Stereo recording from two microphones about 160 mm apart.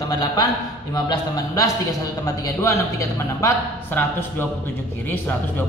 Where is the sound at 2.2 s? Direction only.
20° left (ahead or behind).